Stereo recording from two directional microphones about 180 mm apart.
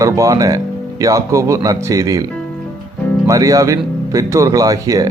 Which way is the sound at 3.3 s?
20° right (ahead or behind).